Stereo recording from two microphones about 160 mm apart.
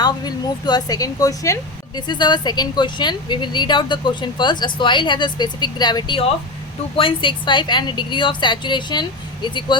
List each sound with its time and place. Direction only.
0.0 s a woman's voice: 25° left (ahead or behind)